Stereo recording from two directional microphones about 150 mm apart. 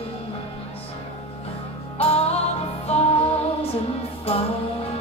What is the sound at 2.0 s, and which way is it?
Music, 40° left (ahead or behind).